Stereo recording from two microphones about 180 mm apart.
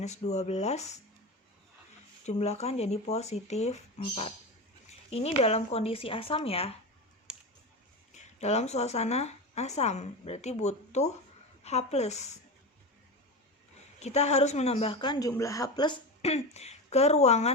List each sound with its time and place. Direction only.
0.0 s a woman's voice: 40° left (ahead or behind)
2.2 s a woman's voice: 35° left (ahead or behind)
7.3 s a sound: 5° right (ahead or behind)
8.1 s a woman's voice: 40° left (ahead or behind)
14.0 s a woman's voice: 40° left (ahead or behind)